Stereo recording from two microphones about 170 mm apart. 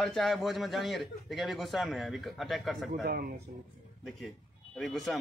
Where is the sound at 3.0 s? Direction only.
65° right (ahead or behind).